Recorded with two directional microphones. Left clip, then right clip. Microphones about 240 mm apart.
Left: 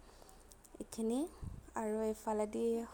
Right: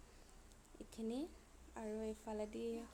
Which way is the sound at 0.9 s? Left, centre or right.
Left.